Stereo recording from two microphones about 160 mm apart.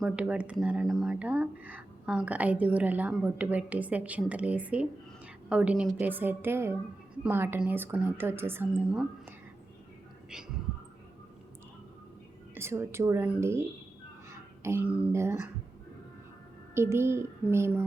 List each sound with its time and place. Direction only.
0.0 s speech: 5° right (ahead or behind)
10.2 s speech: 5° right (ahead or behind)
12.5 s speech: 15° right (ahead or behind)
16.7 s speech: 15° right (ahead or behind)